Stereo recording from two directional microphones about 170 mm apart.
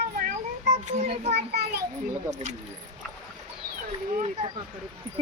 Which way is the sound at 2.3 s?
45° right (ahead or behind).